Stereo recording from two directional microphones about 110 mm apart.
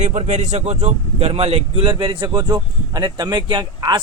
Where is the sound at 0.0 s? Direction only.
90° right; by 2.4 s 50° right (ahead or behind).